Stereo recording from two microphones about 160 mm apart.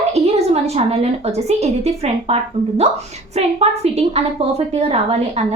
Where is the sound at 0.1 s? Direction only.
40° right (ahead or behind).